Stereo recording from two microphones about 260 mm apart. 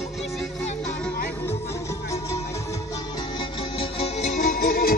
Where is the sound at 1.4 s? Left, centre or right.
Centre.